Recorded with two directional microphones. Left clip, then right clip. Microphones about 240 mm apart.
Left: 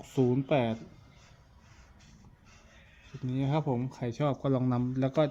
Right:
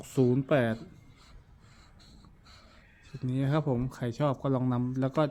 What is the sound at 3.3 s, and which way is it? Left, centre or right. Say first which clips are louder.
Speech: right 1 dB; centre.